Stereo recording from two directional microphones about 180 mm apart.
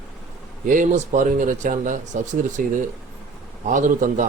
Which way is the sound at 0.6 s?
45° right (ahead or behind).